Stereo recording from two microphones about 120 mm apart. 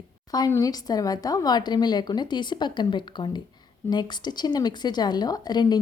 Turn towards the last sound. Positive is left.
turn(degrees=35)  # may be behind; listen again after turning